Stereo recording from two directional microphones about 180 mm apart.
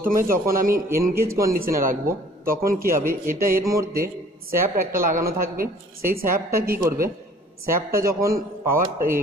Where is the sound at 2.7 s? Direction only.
50° right (ahead or behind).